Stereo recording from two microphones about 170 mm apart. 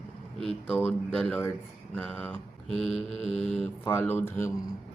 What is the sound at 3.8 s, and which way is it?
Speech, 10° left (ahead or behind).